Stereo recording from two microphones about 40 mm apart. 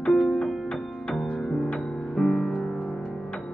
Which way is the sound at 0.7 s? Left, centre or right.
Centre.